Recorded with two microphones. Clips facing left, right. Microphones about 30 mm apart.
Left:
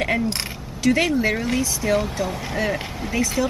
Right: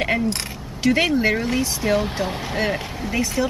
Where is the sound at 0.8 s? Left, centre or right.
Right.